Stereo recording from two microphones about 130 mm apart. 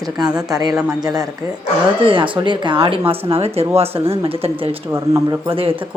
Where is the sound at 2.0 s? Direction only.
40° right (ahead or behind).